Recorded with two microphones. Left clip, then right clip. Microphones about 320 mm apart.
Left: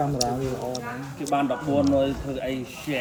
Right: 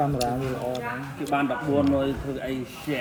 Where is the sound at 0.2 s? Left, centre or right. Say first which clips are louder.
Even; centre.